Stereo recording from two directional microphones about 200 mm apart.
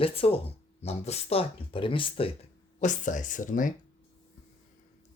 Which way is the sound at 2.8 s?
40° left (ahead or behind).